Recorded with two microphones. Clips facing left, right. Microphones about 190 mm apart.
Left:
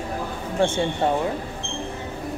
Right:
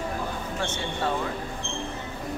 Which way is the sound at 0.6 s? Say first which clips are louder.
Left 10 dB; 30° left (ahead or behind).